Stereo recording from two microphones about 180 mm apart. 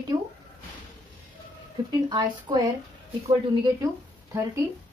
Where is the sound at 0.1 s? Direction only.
35° right (ahead or behind).